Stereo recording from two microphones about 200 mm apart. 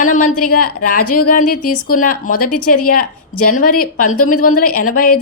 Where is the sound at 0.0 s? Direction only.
40° left (ahead or behind).